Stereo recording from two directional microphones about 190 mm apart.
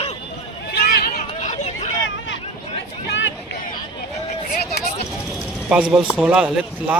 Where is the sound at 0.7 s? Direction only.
55° left (ahead or behind).